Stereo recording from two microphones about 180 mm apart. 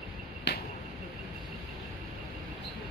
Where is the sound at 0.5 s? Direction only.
70° left (ahead or behind).